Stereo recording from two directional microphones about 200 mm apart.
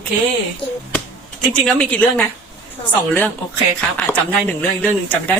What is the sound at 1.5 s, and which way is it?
Speech, 5° left (ahead or behind).